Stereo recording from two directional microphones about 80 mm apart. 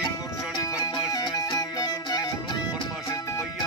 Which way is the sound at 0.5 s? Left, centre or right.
Left.